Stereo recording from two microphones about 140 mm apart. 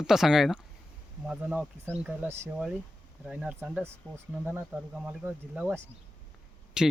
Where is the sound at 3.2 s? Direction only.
5° right (ahead or behind).